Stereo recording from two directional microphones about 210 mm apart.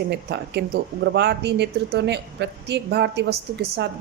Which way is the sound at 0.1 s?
50° right (ahead or behind).